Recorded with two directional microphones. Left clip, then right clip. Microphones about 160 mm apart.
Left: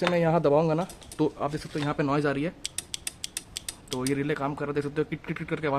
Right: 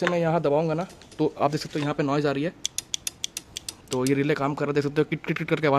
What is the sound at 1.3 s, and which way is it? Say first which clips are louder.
Speech: right 6 dB; 30° right (ahead or behind).